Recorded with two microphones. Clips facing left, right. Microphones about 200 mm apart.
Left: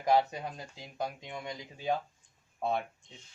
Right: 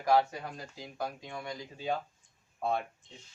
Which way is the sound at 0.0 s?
20° left (ahead or behind).